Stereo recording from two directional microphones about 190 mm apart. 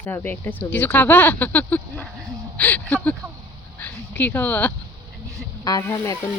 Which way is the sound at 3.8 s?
10° left (ahead or behind).